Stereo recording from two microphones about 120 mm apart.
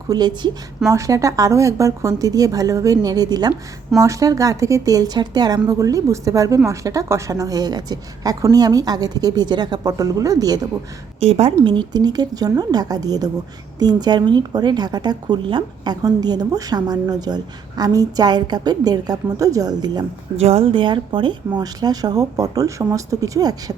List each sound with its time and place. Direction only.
0.1 s a woman's voice: 35° right (ahead or behind)
11.2 s a woman's voice: 55° right (ahead or behind)
11.6 s speech: 40° right (ahead or behind)
20.4 s speech: 55° right (ahead or behind); by 23.7 s 30° right (ahead or behind)